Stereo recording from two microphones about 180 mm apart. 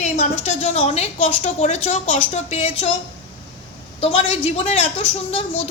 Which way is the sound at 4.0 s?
30° left (ahead or behind).